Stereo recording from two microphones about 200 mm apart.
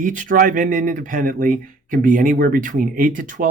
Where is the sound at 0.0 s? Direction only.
40° right (ahead or behind).